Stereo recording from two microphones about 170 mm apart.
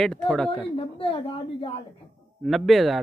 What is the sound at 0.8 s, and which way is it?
A woman's voice, 35° left (ahead or behind).